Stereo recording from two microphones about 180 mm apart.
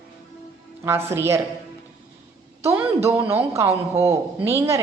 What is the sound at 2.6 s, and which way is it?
A woman's voice, 15° right (ahead or behind).